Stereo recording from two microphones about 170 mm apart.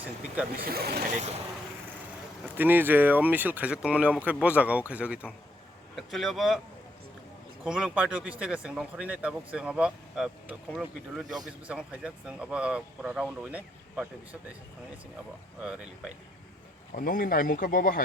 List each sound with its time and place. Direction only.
0.5 s speech: 60° right (ahead or behind)
2.6 s speech: 10° right (ahead or behind)
7.6 s speech: 5° right (ahead or behind)
16.9 s speech: 55° left (ahead or behind)